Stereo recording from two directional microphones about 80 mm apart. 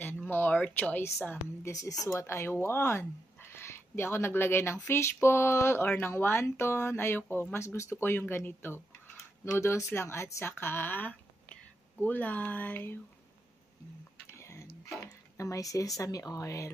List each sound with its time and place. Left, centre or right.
0.0 s a sound: left
1.6 s speech: left
7.5 s speech: left
14.4 s tick-tock: left
15.0 s drip: left
16.0 s speech: left